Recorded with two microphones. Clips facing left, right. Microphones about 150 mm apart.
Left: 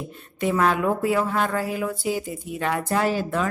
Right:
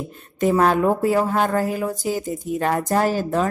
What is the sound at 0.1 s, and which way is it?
Speech, 40° right (ahead or behind).